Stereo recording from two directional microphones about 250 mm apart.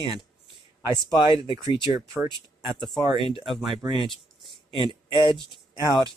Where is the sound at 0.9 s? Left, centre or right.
Centre.